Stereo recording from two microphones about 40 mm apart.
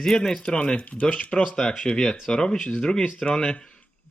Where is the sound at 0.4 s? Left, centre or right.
Left.